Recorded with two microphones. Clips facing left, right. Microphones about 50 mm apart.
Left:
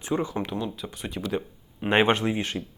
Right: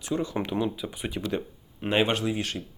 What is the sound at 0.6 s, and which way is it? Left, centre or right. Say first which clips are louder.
Speech: right 3 dB; centre.